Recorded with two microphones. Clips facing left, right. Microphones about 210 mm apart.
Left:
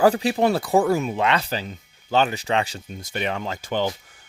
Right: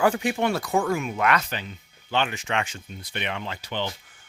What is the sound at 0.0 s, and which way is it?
Speech, 35° left (ahead or behind).